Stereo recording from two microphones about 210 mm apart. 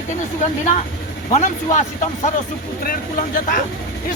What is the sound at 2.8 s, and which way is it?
Speech, 40° left (ahead or behind).